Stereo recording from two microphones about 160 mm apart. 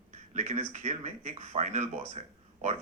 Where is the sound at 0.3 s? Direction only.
45° right (ahead or behind).